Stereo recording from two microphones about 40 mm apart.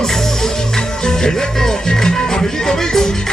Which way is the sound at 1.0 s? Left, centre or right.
Centre.